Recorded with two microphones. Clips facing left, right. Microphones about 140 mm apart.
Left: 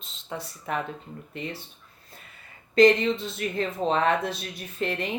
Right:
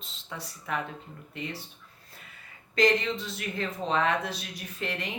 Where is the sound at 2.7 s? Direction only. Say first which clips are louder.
Left 6 dB; 25° left (ahead or behind).